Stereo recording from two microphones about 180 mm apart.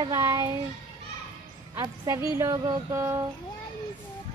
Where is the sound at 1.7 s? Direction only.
20° right (ahead or behind).